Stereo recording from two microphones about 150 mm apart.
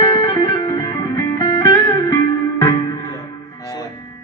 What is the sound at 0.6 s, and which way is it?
Music, 25° left (ahead or behind).